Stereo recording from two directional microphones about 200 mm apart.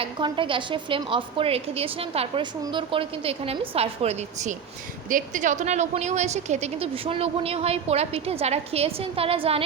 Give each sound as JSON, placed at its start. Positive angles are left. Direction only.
{"t": 0.0, "sound": "a woman's voice", "side_deg": -25}